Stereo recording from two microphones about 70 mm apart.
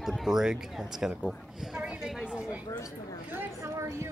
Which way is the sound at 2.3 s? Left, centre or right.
Centre.